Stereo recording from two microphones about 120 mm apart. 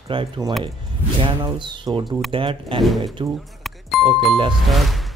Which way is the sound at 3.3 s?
Centre (ahead or behind).